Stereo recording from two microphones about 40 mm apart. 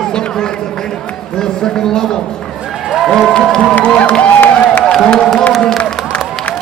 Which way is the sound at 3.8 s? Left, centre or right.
Left.